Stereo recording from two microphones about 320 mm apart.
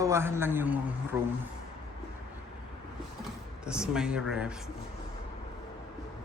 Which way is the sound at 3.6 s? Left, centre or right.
Centre.